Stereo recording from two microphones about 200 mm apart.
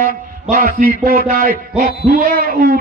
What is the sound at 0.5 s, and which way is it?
A man's voice, 40° right (ahead or behind).